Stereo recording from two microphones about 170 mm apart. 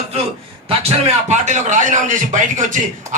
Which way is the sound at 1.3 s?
45° right (ahead or behind).